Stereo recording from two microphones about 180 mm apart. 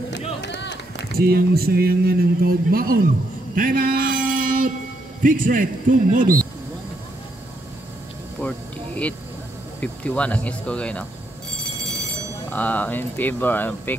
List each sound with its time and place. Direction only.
0.4 s run: 75° left (ahead or behind)
1.1 s speech: 60° right (ahead or behind)
3.5 s a sound: 50° right (ahead or behind)
5.2 s a man's voice: 45° right (ahead or behind)
8.4 s a sound: 5° left (ahead or behind)
9.8 s speech: 5° left (ahead or behind)
12.4 s speech: 10° left (ahead or behind)